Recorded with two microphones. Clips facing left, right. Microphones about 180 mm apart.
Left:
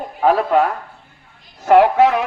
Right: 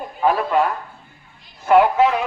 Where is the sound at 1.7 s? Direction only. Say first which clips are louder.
Left 3 dB; 70° left (ahead or behind).